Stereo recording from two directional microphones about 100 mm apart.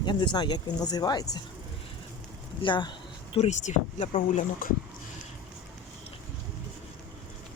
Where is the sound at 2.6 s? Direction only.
55° left (ahead or behind).